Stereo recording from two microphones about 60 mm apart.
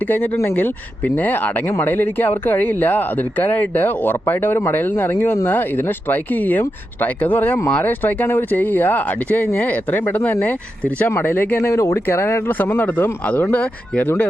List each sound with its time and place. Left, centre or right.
0.5 s speech: left
11.7 s speech: left
12.0 s speech: left